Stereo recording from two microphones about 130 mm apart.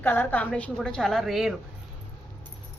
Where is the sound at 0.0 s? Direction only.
15° left (ahead or behind); by 1.5 s centre (ahead or behind).